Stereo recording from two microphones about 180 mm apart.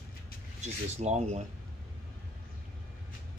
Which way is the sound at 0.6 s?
40° right (ahead or behind).